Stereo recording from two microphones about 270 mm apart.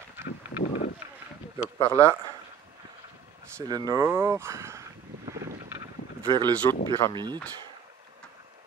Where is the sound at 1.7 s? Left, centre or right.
Centre.